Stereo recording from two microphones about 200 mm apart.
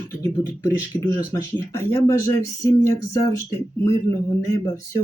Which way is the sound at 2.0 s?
15° left (ahead or behind).